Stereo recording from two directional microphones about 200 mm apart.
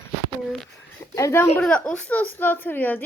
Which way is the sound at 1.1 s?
15° left (ahead or behind).